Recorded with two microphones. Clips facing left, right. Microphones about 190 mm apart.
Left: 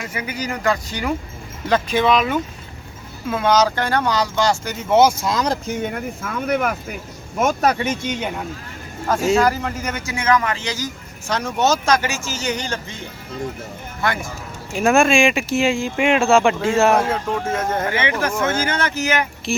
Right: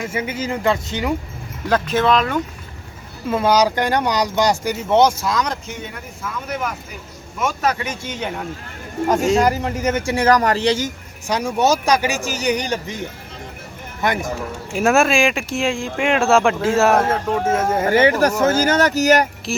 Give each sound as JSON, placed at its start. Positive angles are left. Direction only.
{"t": 0.0, "sound": "speech", "side_deg": -25}
{"t": 1.6, "sound": "speech", "side_deg": 0}
{"t": 4.9, "sound": "speech", "side_deg": 5}
{"t": 5.2, "sound": "speech", "side_deg": 25}
{"t": 5.8, "sound": "speech", "side_deg": 55}
{"t": 8.0, "sound": "speech", "side_deg": 10}
{"t": 9.4, "sound": "speech", "side_deg": -20}
{"t": 10.2, "sound": "speech", "side_deg": -40}
{"t": 11.3, "sound": "speech", "side_deg": -10}
{"t": 14.8, "sound": "speech", "side_deg": -5}
{"t": 17.8, "sound": "speech", "side_deg": -40}